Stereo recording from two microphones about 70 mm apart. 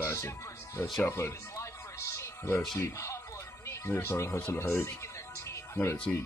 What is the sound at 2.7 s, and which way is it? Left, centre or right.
Speech, left.